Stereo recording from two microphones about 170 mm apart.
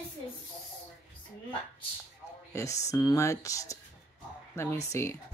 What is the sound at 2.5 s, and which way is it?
Speech, 20° left (ahead or behind).